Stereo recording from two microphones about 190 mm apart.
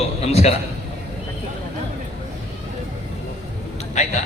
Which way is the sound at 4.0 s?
35° left (ahead or behind).